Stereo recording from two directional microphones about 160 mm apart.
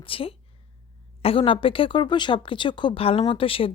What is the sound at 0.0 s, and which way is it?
Speech, 35° left (ahead or behind).